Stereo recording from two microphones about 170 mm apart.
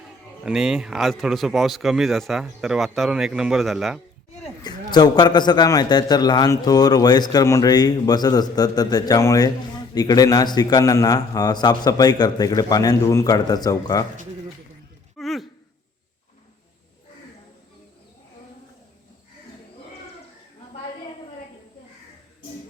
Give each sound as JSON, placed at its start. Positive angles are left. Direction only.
{"t": 0.4, "sound": "speech", "side_deg": -5}
{"t": 4.6, "sound": "a man's voice", "side_deg": 25}
{"t": 15.2, "sound": "a sound", "side_deg": 0}